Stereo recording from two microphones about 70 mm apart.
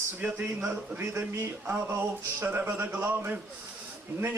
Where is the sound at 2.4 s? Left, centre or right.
Right.